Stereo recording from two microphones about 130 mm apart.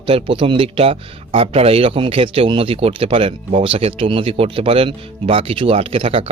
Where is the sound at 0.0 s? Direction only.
40° right (ahead or behind).